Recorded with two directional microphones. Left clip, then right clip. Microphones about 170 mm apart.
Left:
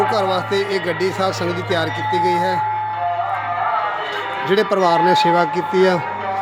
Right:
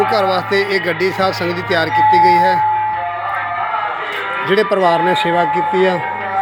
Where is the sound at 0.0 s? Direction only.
Centre (ahead or behind).